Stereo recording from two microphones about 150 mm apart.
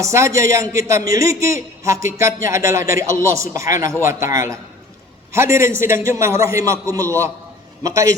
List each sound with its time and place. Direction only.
0.0 s a man's voice: 20° right (ahead or behind)